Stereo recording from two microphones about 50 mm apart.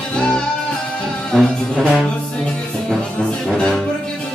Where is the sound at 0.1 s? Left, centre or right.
Centre.